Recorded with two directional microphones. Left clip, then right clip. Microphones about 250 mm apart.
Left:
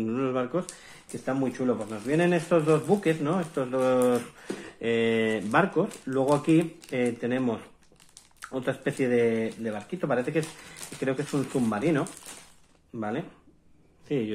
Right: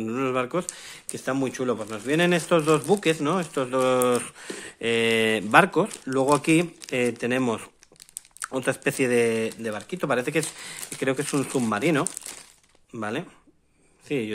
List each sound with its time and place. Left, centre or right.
0.0 s speech: right
14.0 s speech: right